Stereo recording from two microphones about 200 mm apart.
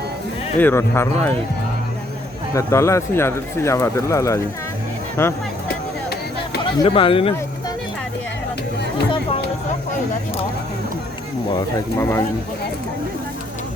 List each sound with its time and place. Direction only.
0.6 s speech: 10° left (ahead or behind)
2.6 s speech: 15° left (ahead or behind)
5.6 s a sound: 55° left (ahead or behind)
6.8 s speech: 25° left (ahead or behind)
11.5 s speech: 15° left (ahead or behind)